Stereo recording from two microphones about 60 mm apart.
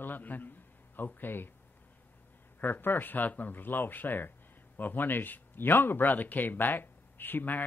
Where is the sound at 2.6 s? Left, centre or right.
Left.